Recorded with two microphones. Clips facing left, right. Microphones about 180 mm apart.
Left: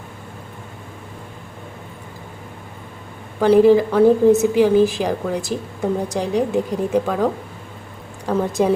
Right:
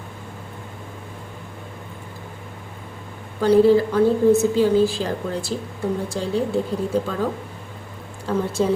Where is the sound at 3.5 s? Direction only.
15° left (ahead or behind).